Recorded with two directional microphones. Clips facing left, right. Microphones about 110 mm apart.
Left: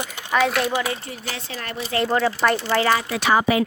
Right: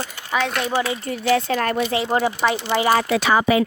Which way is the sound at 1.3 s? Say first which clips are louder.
Right 14 dB; 60° right (ahead or behind).